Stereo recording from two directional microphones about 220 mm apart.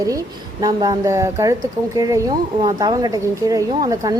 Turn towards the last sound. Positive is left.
turn(degrees=-15)  # may be behind; listen again after turning